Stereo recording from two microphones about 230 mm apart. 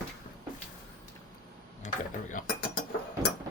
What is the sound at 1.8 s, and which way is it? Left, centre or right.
Tick-tock, left.